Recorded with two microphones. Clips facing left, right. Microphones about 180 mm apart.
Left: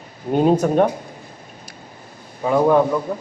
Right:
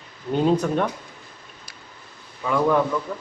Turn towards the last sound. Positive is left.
turn(degrees=40)  # may be behind; listen again after turning